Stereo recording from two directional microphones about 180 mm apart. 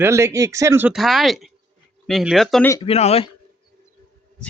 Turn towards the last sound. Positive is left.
turn(degrees=35)  # may be behind; listen again after turning